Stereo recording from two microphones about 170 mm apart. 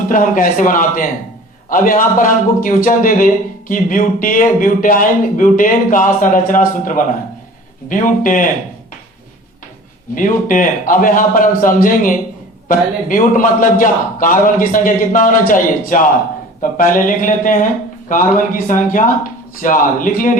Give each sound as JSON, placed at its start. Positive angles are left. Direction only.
{"t": 0.1, "sound": "a man's voice", "side_deg": 50}
{"t": 10.2, "sound": "a man's voice", "side_deg": 50}